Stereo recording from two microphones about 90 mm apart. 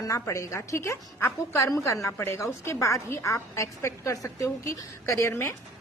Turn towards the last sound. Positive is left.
turn(degrees=30)  # may be behind; listen again after turning